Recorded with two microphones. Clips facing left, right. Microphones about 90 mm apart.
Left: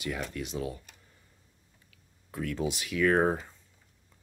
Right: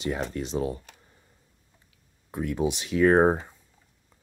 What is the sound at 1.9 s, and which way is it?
Speech, 20° right (ahead or behind).